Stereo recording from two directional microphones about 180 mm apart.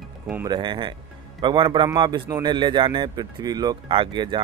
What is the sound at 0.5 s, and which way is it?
Speech, 25° right (ahead or behind).